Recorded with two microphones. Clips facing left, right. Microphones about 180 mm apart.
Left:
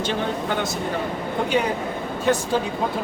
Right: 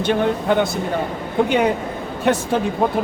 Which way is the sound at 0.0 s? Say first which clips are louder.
Right 6 dB; 60° right (ahead or behind).